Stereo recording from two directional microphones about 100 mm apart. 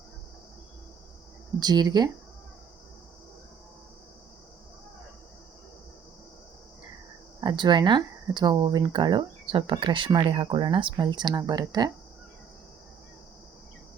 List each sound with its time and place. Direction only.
1.5 s speech: 45° right (ahead or behind)
7.4 s speech: 50° right (ahead or behind)
10.9 s speech: 50° right (ahead or behind)